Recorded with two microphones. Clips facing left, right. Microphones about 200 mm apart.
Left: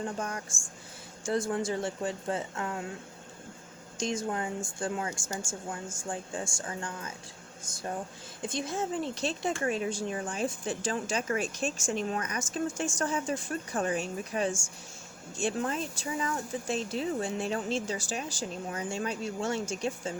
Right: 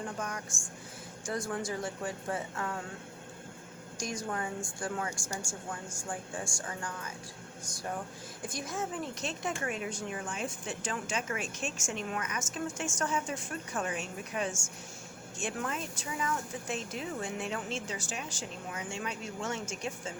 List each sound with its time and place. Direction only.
0.2 s a woman's voice: 30° left (ahead or behind)
3.9 s a woman's voice: 25° left (ahead or behind)
8.4 s speech: 25° left (ahead or behind)